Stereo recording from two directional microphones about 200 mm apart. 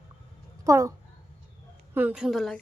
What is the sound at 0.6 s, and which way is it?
A woman's voice, 15° right (ahead or behind).